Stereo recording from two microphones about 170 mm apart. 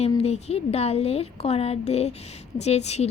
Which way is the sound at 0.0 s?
40° left (ahead or behind).